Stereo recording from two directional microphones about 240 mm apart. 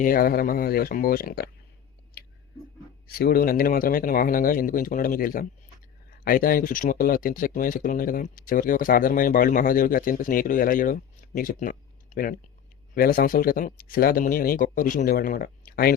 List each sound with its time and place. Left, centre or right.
0.0 s speech: left
2.2 s a sound: left
3.2 s speech: left